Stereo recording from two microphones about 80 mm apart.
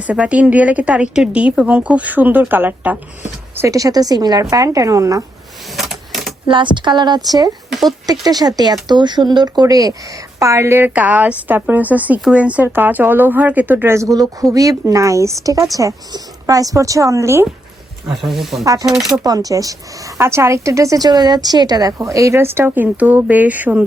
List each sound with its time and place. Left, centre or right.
0.1 s speech: centre
3.7 s speech: right
4.4 s speech: right
5.7 s typewriter: centre
6.5 s speech: right
7.7 s a sound: centre
8.0 s speech: right
13.9 s speech: right
18.1 s speech: centre
18.6 s speech: right
18.9 s speech: centre
19.2 s speech: right
20.1 s a woman's voice: right